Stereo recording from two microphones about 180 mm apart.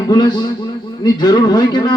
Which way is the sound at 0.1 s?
20° left (ahead or behind).